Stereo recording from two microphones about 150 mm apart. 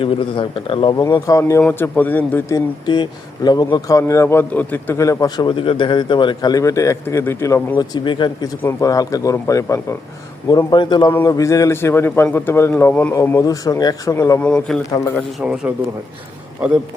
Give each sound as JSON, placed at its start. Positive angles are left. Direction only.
{"t": 0.0, "sound": "a man's voice", "side_deg": 35}
{"t": 0.9, "sound": "a man's voice", "side_deg": 20}
{"t": 2.8, "sound": "a man's voice", "side_deg": 30}
{"t": 10.7, "sound": "a man's voice", "side_deg": 30}
{"t": 11.1, "sound": "a man's voice", "side_deg": 20}
{"t": 14.4, "sound": "a man's voice", "side_deg": 5}
{"t": 15.4, "sound": "a man's voice", "side_deg": -5}